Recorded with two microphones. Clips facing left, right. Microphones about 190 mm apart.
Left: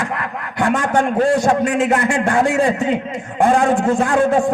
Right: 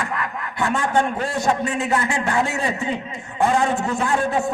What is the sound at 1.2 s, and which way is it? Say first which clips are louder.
A man's voice: left 7 dB; 50° left (ahead or behind).